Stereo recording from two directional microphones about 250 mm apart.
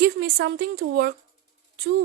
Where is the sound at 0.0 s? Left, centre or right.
Right.